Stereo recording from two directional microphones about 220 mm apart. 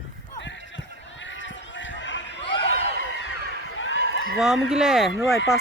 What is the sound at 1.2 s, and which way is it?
Run, 55° left (ahead or behind).